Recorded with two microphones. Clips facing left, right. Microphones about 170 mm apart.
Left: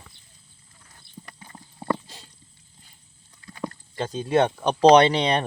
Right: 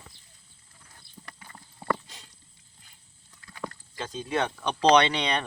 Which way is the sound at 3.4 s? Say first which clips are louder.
Left 5 dB; 20° left (ahead or behind).